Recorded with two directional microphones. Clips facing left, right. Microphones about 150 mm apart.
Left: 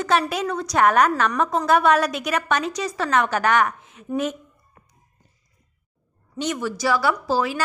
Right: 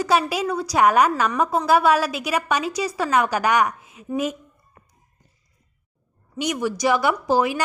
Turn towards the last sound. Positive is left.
turn(degrees=-15)  # may be behind; listen again after turning